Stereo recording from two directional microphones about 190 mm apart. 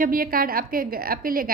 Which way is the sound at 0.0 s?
50° right (ahead or behind).